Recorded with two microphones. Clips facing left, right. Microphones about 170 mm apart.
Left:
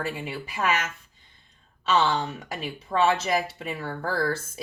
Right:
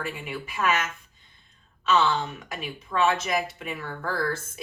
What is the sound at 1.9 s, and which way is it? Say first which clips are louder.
Speech: even; 30° left (ahead or behind).